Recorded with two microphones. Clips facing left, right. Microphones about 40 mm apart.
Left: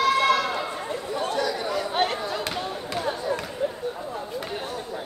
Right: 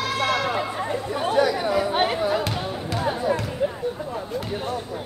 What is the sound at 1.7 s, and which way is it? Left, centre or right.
Chatter, centre.